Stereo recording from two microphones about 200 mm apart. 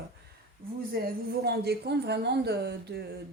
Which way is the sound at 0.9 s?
50° right (ahead or behind).